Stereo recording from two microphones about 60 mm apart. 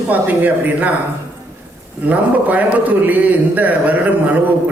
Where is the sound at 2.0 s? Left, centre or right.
Right.